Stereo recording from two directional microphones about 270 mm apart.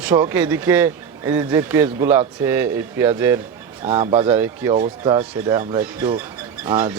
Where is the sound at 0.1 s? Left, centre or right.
Centre.